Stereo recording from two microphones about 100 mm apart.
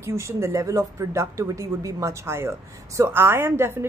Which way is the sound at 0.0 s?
25° right (ahead or behind).